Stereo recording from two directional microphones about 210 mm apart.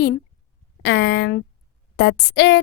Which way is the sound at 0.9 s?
55° left (ahead or behind).